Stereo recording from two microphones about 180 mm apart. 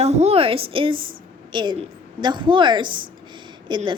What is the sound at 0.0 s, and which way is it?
A woman's voice, 35° right (ahead or behind).